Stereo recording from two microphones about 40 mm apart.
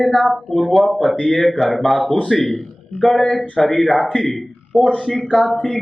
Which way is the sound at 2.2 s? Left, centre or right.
Centre.